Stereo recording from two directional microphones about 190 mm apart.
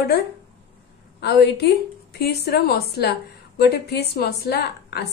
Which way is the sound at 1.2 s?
60° left (ahead or behind).